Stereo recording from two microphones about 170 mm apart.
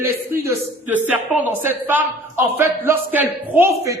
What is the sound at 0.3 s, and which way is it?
A man's voice, 10° right (ahead or behind).